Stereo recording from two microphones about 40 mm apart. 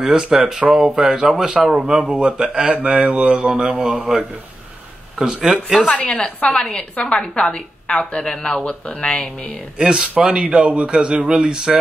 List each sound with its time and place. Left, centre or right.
0.0 s a man's voice: centre
4.0 s a man's voice: centre
5.9 s a woman's voice: left
9.8 s a man's voice: right